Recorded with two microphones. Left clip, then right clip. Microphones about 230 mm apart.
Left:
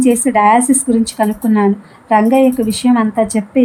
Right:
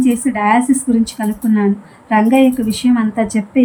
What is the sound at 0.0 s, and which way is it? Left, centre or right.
A woman's voice, left.